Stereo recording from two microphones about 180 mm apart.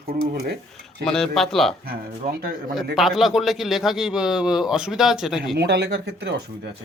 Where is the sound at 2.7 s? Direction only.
Centre (ahead or behind).